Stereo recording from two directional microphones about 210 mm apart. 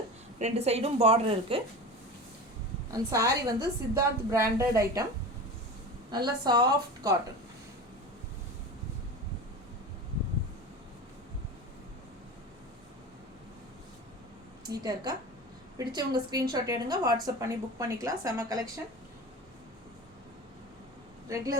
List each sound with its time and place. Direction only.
0.3 s a woman's voice: 30° right (ahead or behind)
2.9 s a woman's voice: 15° right (ahead or behind)
6.1 s a woman's voice: 20° right (ahead or behind)
14.6 s a woman's voice: 20° right (ahead or behind)
21.2 s speech: 15° right (ahead or behind)